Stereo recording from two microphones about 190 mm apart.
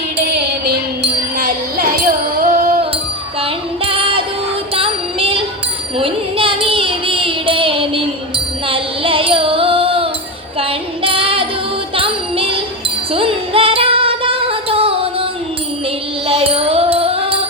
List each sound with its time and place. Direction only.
0.2 s music: 60° right (ahead or behind)
3.4 s music: 30° right (ahead or behind)
4.7 s child singing: 30° right (ahead or behind)
8.6 s carnatic music: 30° right (ahead or behind)
10.6 s child singing: 30° right (ahead or behind)
11.9 s music: 30° right (ahead or behind)